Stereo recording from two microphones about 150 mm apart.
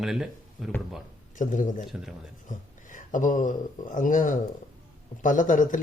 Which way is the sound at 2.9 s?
60° left (ahead or behind).